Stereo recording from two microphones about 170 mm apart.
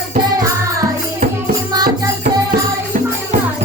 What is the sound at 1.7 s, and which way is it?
Music, 25° right (ahead or behind).